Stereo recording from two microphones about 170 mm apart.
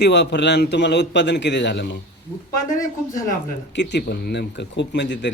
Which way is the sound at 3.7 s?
90° left.